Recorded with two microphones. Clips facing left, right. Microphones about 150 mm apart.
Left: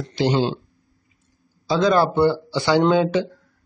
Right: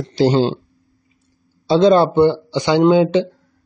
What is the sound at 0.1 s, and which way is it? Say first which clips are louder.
Speech: right 5 dB; 35° right (ahead or behind).